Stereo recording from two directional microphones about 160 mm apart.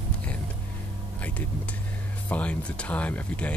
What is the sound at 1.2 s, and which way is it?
Speech, 10° left (ahead or behind).